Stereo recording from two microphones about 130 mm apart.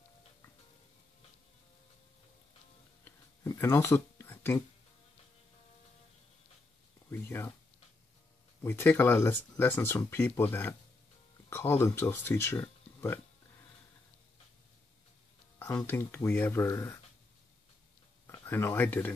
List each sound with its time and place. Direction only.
3.4 s speech: 20° left (ahead or behind)
7.1 s a sound: 20° left (ahead or behind)
8.6 s speech: 20° left (ahead or behind)
15.6 s speech: 25° left (ahead or behind)
18.2 s speech: 15° left (ahead or behind)